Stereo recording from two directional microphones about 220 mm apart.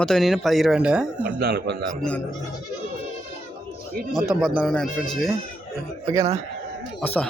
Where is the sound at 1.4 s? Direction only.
45° right (ahead or behind).